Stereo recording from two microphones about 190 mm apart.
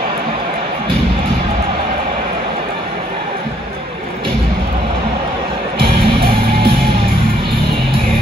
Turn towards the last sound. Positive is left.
turn(degrees=-25)  # may be behind; listen again after turning